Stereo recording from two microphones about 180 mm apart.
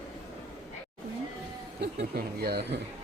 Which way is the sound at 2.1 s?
60° right (ahead or behind).